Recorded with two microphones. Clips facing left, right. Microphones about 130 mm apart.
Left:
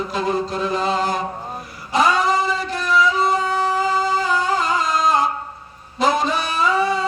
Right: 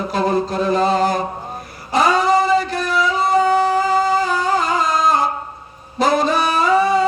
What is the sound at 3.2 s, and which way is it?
Music, 40° right (ahead or behind).